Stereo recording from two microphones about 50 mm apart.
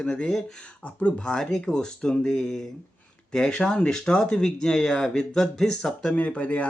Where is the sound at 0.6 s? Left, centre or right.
Left.